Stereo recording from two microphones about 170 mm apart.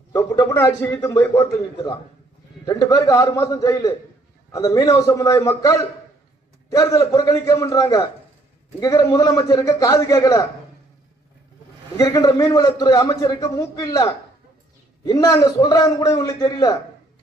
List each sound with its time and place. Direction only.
0.1 s a man's voice: 20° left (ahead or behind)
12.0 s a man's voice: 20° left (ahead or behind)